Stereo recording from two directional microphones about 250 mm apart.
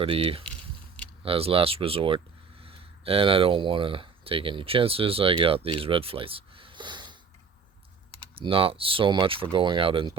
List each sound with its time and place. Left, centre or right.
0.0 s speech: right
8.4 s speech: right